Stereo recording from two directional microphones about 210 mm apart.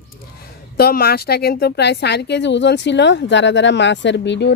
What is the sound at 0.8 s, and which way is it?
Speech, 50° left (ahead or behind).